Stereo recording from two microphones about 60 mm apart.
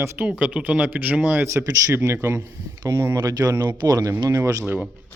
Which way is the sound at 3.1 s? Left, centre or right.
Right.